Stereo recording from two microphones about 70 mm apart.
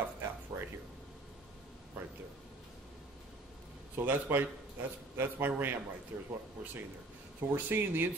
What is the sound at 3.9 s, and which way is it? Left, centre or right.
Speech, right.